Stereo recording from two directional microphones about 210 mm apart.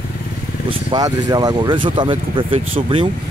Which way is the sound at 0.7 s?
20° right (ahead or behind).